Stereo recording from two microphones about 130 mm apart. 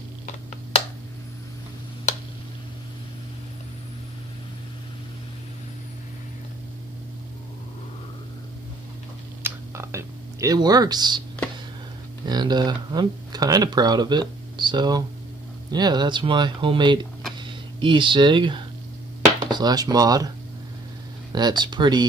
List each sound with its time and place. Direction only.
9.4 s a sound: 20° right (ahead or behind)
12.3 s speech: 30° right (ahead or behind)
21.3 s speech: 35° right (ahead or behind)